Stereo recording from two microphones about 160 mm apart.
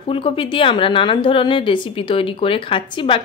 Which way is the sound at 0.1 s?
35° left (ahead or behind).